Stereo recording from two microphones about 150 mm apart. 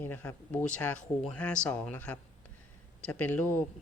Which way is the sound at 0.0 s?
15° left (ahead or behind).